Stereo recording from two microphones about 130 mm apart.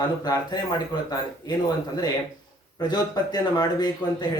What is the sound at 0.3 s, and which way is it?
A man's voice, 30° left (ahead or behind).